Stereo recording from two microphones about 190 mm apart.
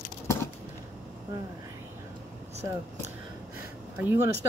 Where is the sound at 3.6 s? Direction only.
10° right (ahead or behind).